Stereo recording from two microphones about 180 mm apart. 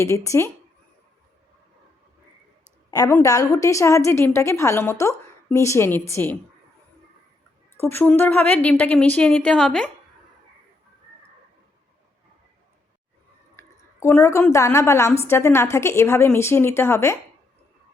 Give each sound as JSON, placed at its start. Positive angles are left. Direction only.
{"t": 0.3, "sound": "a woman's voice", "side_deg": 15}
{"t": 2.9, "sound": "a woman's voice", "side_deg": 15}
{"t": 7.8, "sound": "a woman's voice", "side_deg": 10}
{"t": 13.6, "sound": "a woman's voice", "side_deg": 15}